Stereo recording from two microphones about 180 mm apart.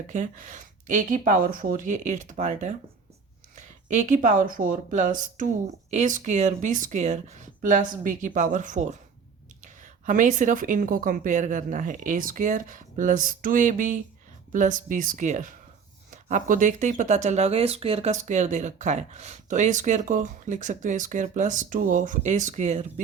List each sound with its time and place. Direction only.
0.1 s speech: 45° right (ahead or behind)